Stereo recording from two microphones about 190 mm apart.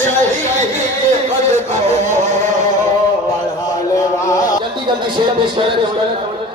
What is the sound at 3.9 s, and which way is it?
Music, 15° left (ahead or behind).